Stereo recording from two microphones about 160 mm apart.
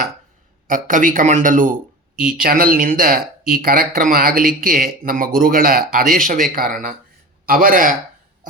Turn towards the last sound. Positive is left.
turn(degrees=-60)  # may be behind; listen again after turning